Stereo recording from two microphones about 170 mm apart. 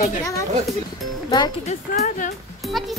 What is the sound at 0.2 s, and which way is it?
Speech, 20° left (ahead or behind).